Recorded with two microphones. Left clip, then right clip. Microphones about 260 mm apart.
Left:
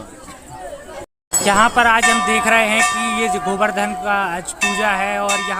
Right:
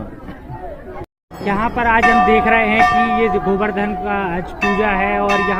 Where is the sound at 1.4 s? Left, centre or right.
Left.